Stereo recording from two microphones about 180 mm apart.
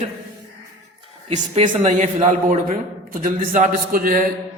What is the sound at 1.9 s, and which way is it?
A man's voice, 45° right (ahead or behind).